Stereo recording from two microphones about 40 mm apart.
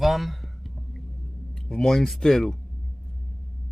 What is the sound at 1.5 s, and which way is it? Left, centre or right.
Speech, centre.